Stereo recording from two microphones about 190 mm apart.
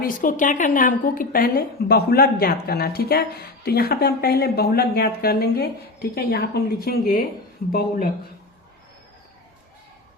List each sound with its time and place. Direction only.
0.0 s a woman's voice: 45° left (ahead or behind)